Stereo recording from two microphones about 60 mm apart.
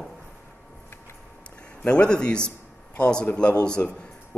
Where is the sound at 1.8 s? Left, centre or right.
Centre.